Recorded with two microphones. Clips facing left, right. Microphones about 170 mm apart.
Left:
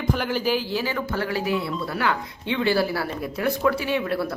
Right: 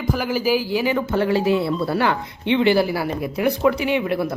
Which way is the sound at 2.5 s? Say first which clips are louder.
Right 5 dB; 20° right (ahead or behind).